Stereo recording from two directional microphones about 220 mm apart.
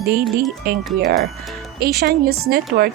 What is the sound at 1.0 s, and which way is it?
Speech, 50° right (ahead or behind).